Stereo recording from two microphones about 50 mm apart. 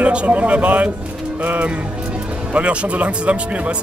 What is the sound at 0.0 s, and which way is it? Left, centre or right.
Speech, right.